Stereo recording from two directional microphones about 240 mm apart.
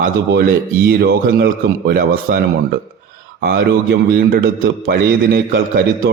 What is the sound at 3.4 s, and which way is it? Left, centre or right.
A man's voice, right.